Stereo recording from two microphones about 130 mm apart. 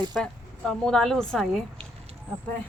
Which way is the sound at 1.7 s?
50° right (ahead or behind).